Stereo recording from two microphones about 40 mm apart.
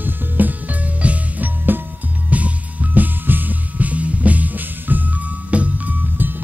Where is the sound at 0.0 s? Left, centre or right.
Right.